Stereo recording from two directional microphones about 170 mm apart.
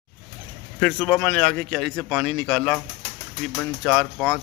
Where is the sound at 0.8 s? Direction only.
Centre (ahead or behind).